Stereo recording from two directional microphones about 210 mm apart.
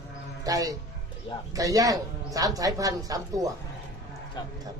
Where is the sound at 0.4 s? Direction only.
15° right (ahead or behind).